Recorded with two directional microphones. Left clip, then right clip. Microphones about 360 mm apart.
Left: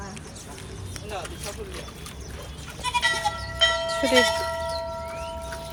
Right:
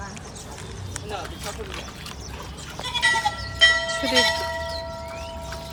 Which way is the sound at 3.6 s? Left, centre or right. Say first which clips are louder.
Right 5 dB; centre.